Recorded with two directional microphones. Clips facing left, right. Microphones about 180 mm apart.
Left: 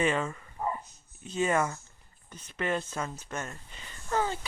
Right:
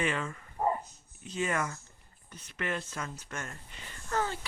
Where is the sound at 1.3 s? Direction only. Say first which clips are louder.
Left 5 dB; 25° left (ahead or behind).